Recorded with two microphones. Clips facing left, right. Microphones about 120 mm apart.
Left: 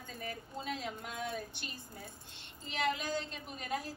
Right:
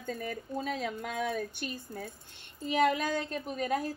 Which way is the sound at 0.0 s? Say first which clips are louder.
Right 7 dB; 50° right (ahead or behind).